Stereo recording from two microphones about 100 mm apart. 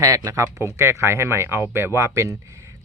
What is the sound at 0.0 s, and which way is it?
Speech, 35° right (ahead or behind).